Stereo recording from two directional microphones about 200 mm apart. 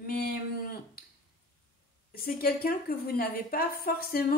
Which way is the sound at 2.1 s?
45° left (ahead or behind).